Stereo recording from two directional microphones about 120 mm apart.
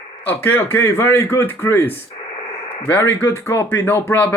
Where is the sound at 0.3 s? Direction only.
15° left (ahead or behind).